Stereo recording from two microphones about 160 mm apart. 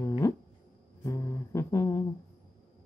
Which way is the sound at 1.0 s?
20° left (ahead or behind).